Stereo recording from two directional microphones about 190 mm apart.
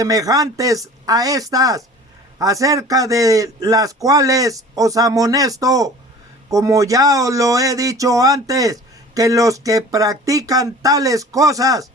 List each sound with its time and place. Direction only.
0.0 s speech: 20° right (ahead or behind)